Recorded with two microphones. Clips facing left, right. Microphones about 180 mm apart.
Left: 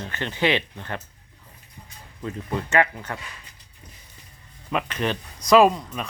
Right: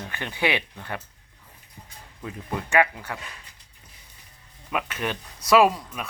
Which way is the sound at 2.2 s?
5° right (ahead or behind).